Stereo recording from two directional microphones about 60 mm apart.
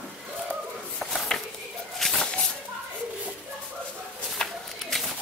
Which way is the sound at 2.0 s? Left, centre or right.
Centre.